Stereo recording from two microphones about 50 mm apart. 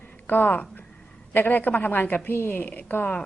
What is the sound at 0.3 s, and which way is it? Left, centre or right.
A woman's voice, left.